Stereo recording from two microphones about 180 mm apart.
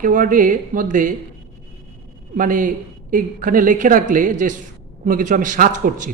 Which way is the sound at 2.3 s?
45° right (ahead or behind).